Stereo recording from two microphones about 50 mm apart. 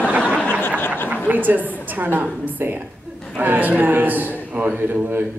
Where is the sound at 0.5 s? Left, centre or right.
Left.